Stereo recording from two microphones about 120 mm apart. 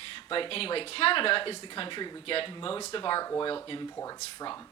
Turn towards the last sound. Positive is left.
turn(degrees=45)  # may be behind; listen again after turning